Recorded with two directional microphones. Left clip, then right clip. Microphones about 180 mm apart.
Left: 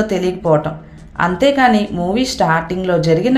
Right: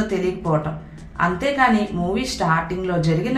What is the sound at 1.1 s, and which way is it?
Speech, 35° left (ahead or behind).